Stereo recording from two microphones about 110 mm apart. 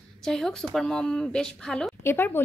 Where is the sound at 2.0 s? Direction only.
20° left (ahead or behind).